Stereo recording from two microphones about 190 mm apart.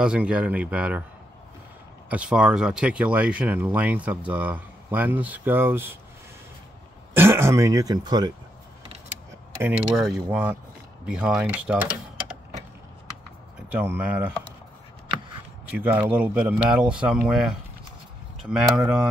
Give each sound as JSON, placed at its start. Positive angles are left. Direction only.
{"t": 0.0, "sound": "speech", "side_deg": -5}
{"t": 2.0, "sound": "speech", "side_deg": -5}
{"t": 7.2, "sound": "speech", "side_deg": -15}
{"t": 9.6, "sound": "speech", "side_deg": -10}
{"t": 13.7, "sound": "speech", "side_deg": -10}
{"t": 15.7, "sound": "speech", "side_deg": -10}